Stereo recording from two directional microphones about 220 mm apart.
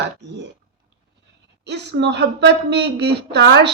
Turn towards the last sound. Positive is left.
turn(degrees=-50)  # may be behind; listen again after turning